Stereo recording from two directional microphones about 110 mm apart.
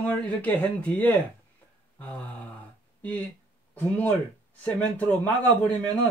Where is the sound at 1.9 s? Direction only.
15° left (ahead or behind).